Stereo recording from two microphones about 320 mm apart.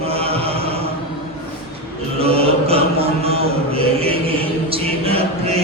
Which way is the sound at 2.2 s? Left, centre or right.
Centre.